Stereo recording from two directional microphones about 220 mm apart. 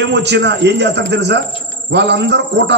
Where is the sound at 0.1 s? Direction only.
50° right (ahead or behind).